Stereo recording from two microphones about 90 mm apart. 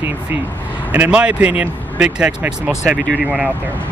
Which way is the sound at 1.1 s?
10° right (ahead or behind).